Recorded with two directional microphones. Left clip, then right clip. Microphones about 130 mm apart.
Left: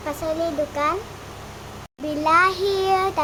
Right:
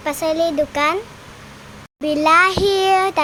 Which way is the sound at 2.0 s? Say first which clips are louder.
Right 4 dB; 50° right (ahead or behind).